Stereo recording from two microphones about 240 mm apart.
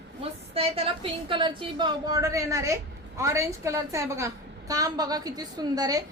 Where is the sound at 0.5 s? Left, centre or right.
Right.